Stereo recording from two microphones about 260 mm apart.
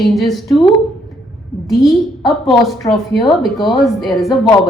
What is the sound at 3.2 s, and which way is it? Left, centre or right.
Speech, centre.